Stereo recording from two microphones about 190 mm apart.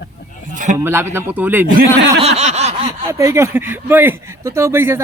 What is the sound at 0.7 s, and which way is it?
Speech, 15° right (ahead or behind).